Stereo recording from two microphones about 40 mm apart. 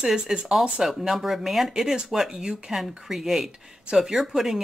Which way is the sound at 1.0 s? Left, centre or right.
Centre.